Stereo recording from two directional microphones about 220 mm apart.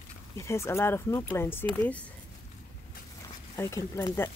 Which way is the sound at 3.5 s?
15° left (ahead or behind).